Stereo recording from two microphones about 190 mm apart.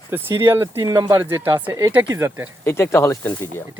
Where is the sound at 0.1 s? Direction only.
10° right (ahead or behind).